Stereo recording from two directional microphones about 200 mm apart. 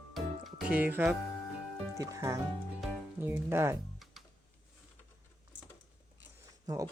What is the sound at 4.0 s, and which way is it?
Music, centre (ahead or behind).